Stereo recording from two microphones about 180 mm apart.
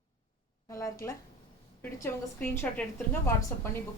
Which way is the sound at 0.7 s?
15° left (ahead or behind).